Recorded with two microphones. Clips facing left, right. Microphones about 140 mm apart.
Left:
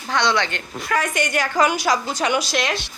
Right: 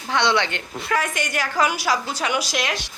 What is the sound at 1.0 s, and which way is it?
A woman's voice, centre (ahead or behind).